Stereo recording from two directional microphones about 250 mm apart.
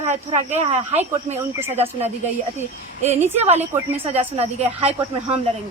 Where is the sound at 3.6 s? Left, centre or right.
Centre.